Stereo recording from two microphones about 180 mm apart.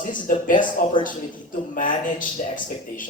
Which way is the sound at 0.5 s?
25° left (ahead or behind).